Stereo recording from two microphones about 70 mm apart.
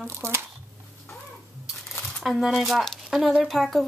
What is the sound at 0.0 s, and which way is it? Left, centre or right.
Speech, right.